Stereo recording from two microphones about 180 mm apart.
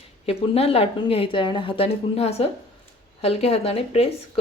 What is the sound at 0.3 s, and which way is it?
A woman's voice, 30° left (ahead or behind).